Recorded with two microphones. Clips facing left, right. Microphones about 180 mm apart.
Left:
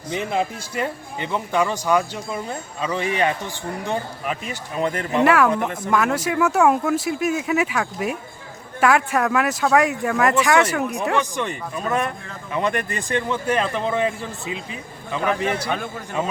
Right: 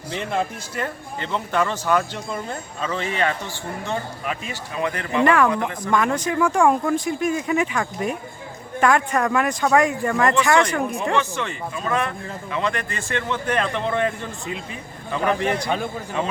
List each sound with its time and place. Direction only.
0.1 s speech: 5° left (ahead or behind)
2.8 s speech: 15° left (ahead or behind)
5.1 s speech: 5° left (ahead or behind)
5.5 s speech: 20° left (ahead or behind)
5.9 s speech: 5° left (ahead or behind)
11.2 s speech: 15° left (ahead or behind)